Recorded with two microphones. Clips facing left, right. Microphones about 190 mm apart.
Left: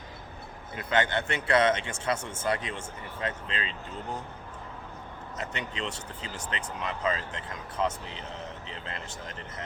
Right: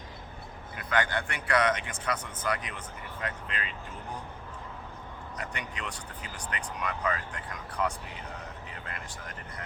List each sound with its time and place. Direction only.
0.8 s a man's voice: 25° left (ahead or behind)
5.4 s a man's voice: 25° left (ahead or behind)